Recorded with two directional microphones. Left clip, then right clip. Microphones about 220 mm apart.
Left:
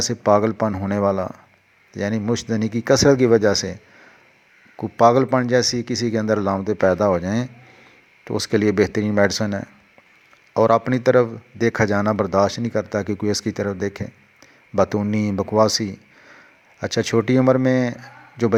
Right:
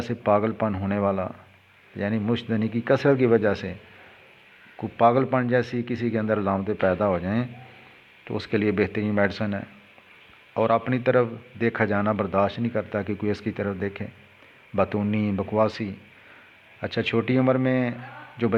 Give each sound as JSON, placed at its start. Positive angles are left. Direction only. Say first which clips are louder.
{"t": 0.0, "sound": "a man's voice", "louder": "left 5 dB", "side_deg": 40}
{"t": 4.8, "sound": "a man's voice", "louder": "left 5 dB", "side_deg": 40}
{"t": 10.5, "sound": "a man's voice", "louder": "left 6 dB", "side_deg": 40}